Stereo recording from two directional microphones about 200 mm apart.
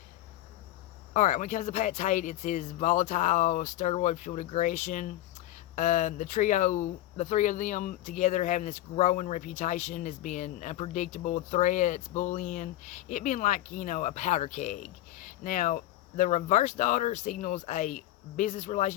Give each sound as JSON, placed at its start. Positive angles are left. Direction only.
{"t": 1.1, "sound": "speech", "side_deg": 35}